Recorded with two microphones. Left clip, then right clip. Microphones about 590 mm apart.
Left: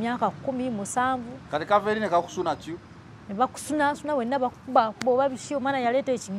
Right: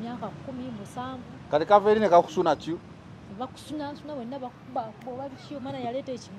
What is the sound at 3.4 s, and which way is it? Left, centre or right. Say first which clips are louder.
Speech: left 11 dB; left.